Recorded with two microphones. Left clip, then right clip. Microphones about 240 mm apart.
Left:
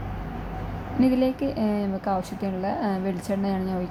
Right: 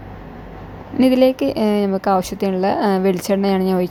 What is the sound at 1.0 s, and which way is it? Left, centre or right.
A woman's voice, right.